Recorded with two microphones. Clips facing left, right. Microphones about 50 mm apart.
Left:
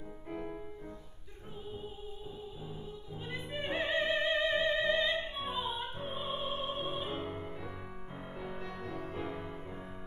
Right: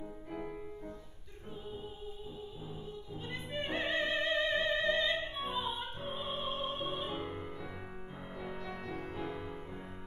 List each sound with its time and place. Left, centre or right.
3.3 s music: centre
6.1 s opera: left
9.2 s music: centre